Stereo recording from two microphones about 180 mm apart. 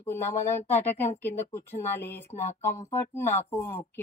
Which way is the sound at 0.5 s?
40° left (ahead or behind).